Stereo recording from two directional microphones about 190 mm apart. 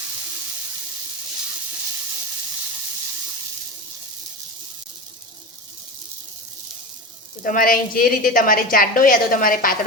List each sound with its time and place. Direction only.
7.4 s a woman's voice: 45° left (ahead or behind)